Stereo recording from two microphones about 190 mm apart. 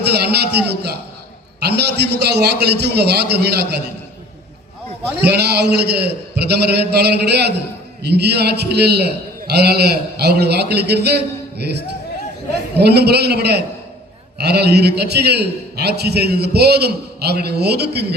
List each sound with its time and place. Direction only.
0.1 s a man's voice: 60° right (ahead or behind)
5.2 s a man's voice: 60° right (ahead or behind)
12.8 s a man's voice: 60° right (ahead or behind)